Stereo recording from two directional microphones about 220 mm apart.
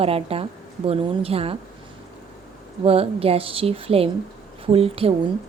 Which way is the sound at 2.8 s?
25° right (ahead or behind).